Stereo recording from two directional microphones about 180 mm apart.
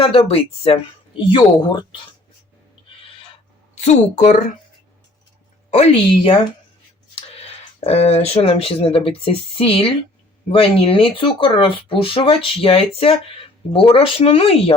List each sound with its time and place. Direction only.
0.0 s speech: 30° left (ahead or behind)
3.8 s a woman's voice: 40° left (ahead or behind)
5.7 s a woman's voice: 35° left (ahead or behind)